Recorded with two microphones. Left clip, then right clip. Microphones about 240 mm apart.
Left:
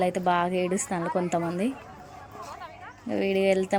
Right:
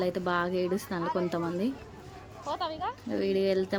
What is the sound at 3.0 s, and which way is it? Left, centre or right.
Speech, centre.